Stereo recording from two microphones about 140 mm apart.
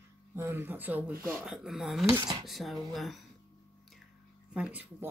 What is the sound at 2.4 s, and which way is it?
Speech, centre (ahead or behind).